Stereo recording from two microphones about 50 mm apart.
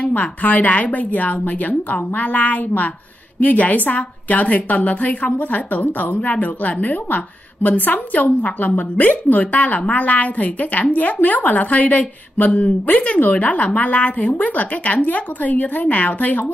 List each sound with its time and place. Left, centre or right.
0.0 s a woman's voice: left